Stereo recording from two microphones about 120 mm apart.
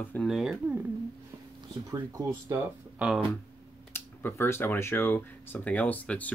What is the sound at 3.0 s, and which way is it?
Speech, 10° right (ahead or behind).